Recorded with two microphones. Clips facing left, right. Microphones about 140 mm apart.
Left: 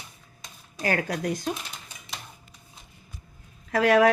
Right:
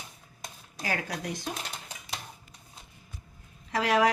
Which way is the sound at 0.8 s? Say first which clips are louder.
Left 7 dB; 55° left (ahead or behind).